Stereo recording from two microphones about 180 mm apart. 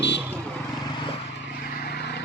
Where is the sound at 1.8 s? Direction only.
65° left (ahead or behind).